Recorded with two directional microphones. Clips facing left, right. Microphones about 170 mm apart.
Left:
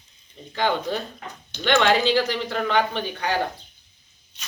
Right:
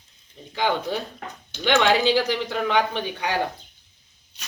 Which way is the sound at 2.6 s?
15° right (ahead or behind).